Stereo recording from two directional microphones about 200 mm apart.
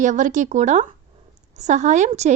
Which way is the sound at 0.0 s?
40° right (ahead or behind).